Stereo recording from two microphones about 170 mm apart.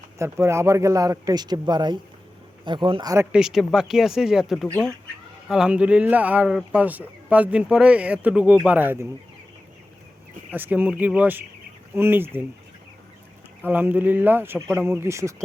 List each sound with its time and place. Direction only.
0.2 s a man's voice: 15° right (ahead or behind)
3.3 s speech: 5° right (ahead or behind)
10.5 s speech: 10° right (ahead or behind)
13.6 s speech: 10° right (ahead or behind)